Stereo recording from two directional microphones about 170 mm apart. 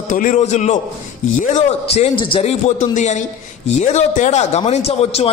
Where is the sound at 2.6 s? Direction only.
45° left (ahead or behind).